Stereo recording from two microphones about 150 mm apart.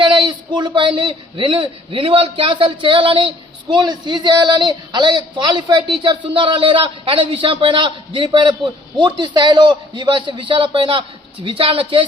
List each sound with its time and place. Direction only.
0.0 s a man's voice: 30° right (ahead or behind)